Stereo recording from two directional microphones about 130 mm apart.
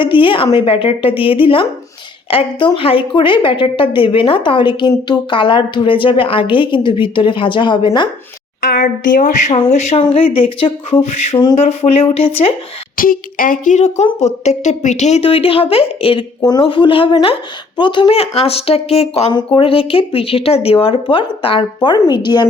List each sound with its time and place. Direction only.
0.0 s a woman's voice: 40° left (ahead or behind)
8.8 s speech: 90° left
9.5 s speech: 55° left (ahead or behind)
10.1 s speech: 45° left (ahead or behind)
11.5 s speech: 50° left (ahead or behind)
13.0 s speech: 90° left; by 16.2 s 45° left (ahead or behind)
16.4 s a woman's voice: 35° left (ahead or behind); by 19.3 s 50° left (ahead or behind)
19.3 s a woman's voice: 40° left (ahead or behind)